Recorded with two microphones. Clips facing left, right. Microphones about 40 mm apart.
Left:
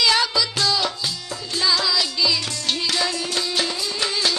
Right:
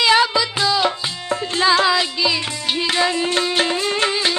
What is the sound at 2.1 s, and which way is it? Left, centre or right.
Music, right.